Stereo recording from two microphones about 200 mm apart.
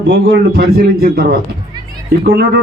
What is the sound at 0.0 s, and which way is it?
A man's voice, 55° right (ahead or behind).